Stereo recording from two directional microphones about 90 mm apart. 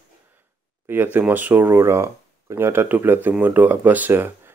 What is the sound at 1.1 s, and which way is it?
Speech, 20° right (ahead or behind).